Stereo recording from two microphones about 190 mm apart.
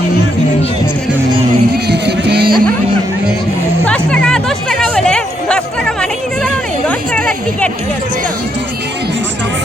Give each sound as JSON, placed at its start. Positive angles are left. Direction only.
{"t": 1.9, "sound": "music", "side_deg": -60}
{"t": 3.8, "sound": "music", "side_deg": 5}